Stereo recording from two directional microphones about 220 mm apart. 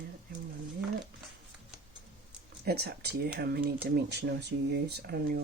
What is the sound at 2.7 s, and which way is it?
Speech, 45° right (ahead or behind).